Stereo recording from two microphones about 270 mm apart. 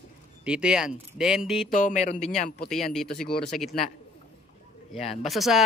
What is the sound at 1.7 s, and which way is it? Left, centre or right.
A man's voice, left.